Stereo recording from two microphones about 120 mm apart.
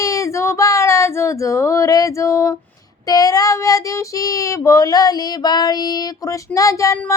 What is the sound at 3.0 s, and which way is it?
Speech, 30° left (ahead or behind).